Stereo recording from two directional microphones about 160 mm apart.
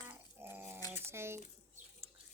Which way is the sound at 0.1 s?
15° right (ahead or behind).